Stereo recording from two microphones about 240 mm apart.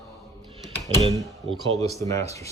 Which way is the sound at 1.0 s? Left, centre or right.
Centre.